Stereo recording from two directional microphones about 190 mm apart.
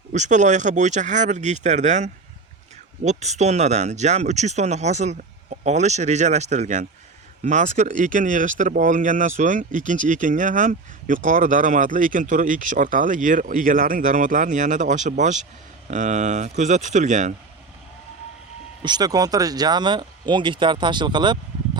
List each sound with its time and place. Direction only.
0.1 s speech: 40° right (ahead or behind)
18.8 s speech: 20° right (ahead or behind)